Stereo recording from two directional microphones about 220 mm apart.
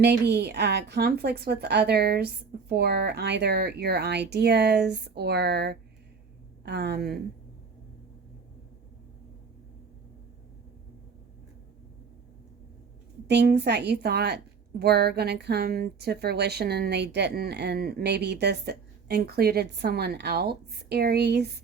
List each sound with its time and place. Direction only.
0.0 s a woman's voice: 50° right (ahead or behind)
13.2 s a woman's voice: 50° right (ahead or behind)